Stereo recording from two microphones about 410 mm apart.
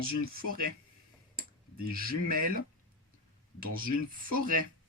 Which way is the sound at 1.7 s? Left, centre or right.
Right.